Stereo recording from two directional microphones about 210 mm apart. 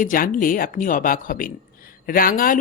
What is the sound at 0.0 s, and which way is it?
A woman's voice, 40° left (ahead or behind).